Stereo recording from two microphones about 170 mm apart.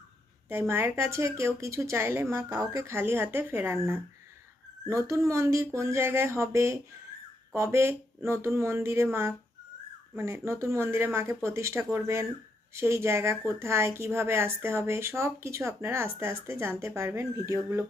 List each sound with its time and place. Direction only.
0.7 s a woman's voice: 15° right (ahead or behind)